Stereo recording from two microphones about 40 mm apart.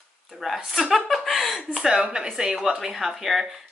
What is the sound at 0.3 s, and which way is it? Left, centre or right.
Speech, centre.